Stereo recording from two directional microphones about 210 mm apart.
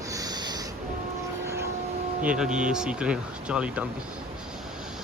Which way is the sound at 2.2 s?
5° right (ahead or behind).